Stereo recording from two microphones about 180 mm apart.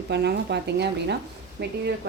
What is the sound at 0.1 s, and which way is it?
A woman's voice, 70° right (ahead or behind).